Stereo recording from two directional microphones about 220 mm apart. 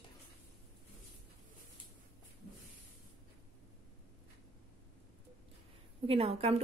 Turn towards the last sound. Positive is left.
turn(degrees=-30)  # may be behind; listen again after turning